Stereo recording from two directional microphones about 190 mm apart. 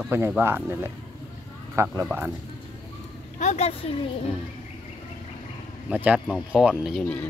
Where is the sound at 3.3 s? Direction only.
35° left (ahead or behind).